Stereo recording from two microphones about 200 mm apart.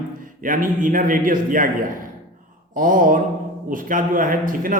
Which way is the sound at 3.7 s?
45° right (ahead or behind).